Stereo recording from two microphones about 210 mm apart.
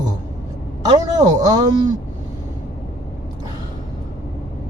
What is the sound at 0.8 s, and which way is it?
Speech, 20° right (ahead or behind).